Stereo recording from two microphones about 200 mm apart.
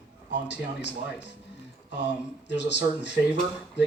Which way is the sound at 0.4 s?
60° left (ahead or behind).